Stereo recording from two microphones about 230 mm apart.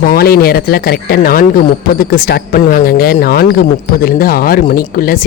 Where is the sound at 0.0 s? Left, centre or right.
Left.